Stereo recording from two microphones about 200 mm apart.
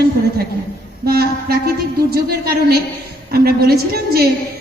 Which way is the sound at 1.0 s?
50° right (ahead or behind).